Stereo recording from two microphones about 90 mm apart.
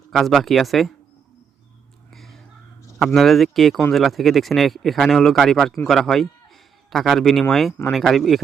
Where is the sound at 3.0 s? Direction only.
Centre (ahead or behind).